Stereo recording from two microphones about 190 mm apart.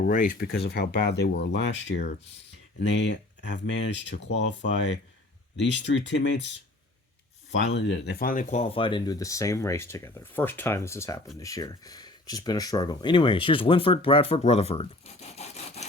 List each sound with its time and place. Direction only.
0.0 s speech: 45° left (ahead or behind); by 1.7 s 60° left (ahead or behind)
2.8 s speech: 65° left (ahead or behind)
7.6 s speech: 65° left (ahead or behind); by 15.9 s 35° left (ahead or behind)